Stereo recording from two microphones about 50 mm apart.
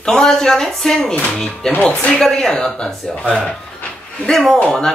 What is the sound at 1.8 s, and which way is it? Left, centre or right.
Speech, left.